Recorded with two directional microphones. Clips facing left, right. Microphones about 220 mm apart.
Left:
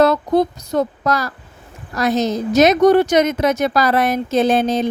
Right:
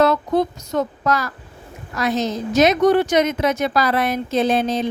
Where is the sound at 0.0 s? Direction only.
40° left (ahead or behind).